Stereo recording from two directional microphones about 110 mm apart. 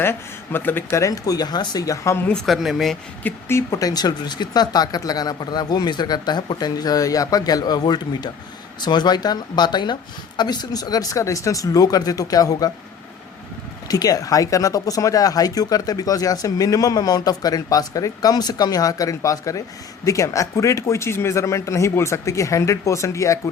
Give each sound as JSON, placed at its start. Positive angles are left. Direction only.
{"t": 0.0, "sound": "speech", "side_deg": 20}
{"t": 2.5, "sound": "speech", "side_deg": 0}
{"t": 3.2, "sound": "speech", "side_deg": 15}
{"t": 3.7, "sound": "speech", "side_deg": 35}
{"t": 13.8, "sound": "speech", "side_deg": 35}